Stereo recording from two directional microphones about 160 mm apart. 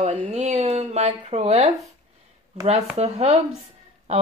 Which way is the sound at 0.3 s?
45° right (ahead or behind).